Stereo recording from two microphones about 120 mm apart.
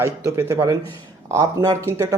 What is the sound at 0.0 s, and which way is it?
Speech, 25° right (ahead or behind).